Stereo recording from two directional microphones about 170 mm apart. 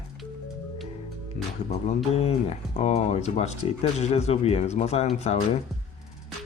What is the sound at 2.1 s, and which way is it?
Speech, 35° left (ahead or behind).